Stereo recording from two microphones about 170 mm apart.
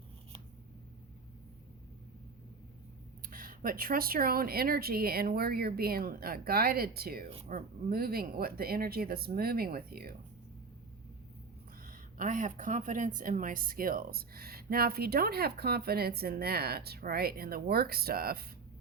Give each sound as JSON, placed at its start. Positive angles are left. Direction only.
{"t": 3.2, "sound": "a woman's voice", "side_deg": -55}
{"t": 11.9, "sound": "a woman's voice", "side_deg": -50}